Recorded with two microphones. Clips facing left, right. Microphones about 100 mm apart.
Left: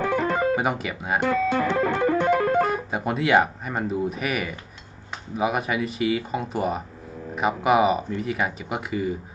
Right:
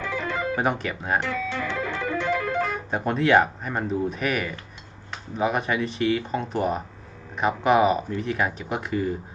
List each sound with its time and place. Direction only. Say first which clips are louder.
0.0 s music: left 6 dB; 50° left (ahead or behind)
0.5 s speech: left 1 dB; 5° left (ahead or behind)
1.2 s music: left 6 dB; 50° left (ahead or behind)
2.9 s speech: right 3 dB; 5° left (ahead or behind)